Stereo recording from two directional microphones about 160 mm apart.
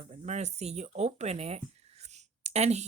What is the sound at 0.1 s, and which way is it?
A woman's voice, 45° right (ahead or behind).